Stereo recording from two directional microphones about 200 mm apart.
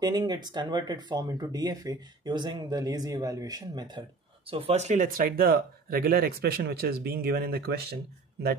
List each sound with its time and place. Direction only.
0.0 s speech: 20° right (ahead or behind); by 7.7 s 50° right (ahead or behind)